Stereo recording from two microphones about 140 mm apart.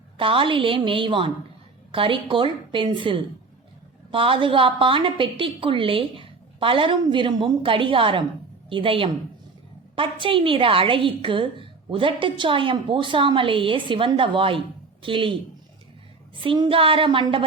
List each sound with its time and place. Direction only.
0.2 s a woman's voice: 40° right (ahead or behind)
16.4 s a woman's voice: 40° right (ahead or behind)